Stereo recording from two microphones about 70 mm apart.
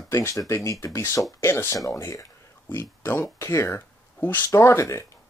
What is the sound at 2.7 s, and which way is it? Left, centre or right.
Speech, left.